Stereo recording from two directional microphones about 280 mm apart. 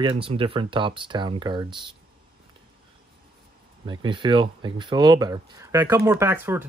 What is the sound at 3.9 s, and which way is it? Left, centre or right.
Speech, centre.